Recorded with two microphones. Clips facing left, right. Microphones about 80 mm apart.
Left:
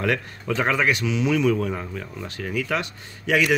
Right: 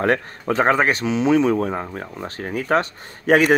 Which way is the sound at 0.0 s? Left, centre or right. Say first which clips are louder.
Right 5 dB; right.